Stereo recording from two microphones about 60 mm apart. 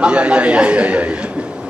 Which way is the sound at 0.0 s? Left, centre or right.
Centre.